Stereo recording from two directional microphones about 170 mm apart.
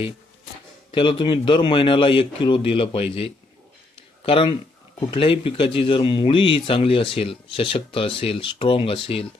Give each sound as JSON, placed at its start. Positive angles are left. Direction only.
{"t": 0.9, "sound": "speech", "side_deg": 30}